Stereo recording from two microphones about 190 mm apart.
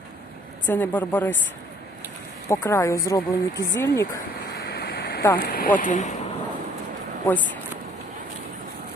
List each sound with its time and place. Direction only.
0.7 s speech: 10° left (ahead or behind)
2.5 s speech: 15° left (ahead or behind)
4.5 s vehicle: 55° left (ahead or behind)
5.4 s speech: 50° left (ahead or behind)
7.3 s speech: 10° left (ahead or behind)